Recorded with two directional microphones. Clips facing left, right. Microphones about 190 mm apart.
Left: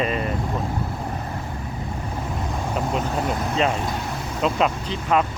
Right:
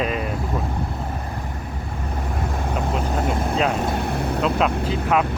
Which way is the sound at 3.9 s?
60° right (ahead or behind).